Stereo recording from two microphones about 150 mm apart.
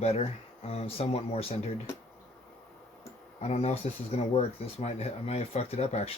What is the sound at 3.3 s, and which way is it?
Speech, 45° left (ahead or behind).